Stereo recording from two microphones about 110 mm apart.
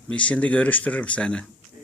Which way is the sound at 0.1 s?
10° left (ahead or behind).